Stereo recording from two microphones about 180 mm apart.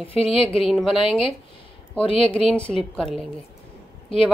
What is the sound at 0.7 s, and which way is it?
Speech, centre (ahead or behind).